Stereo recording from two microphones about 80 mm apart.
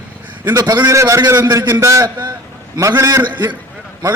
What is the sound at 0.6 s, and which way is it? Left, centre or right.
Speech, right.